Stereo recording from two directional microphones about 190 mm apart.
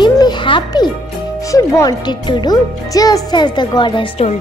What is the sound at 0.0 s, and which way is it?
Music, 25° left (ahead or behind).